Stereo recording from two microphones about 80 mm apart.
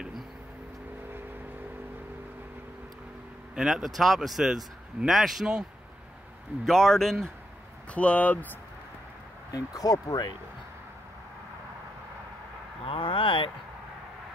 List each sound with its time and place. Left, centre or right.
3.5 s speech: centre
6.6 s speech: centre
7.9 s speech: centre
9.5 s speech: left
12.9 s a sound: left